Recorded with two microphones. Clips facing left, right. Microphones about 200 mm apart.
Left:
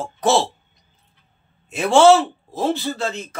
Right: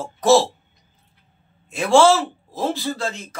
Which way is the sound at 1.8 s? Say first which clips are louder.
Left 2 dB; 25° left (ahead or behind).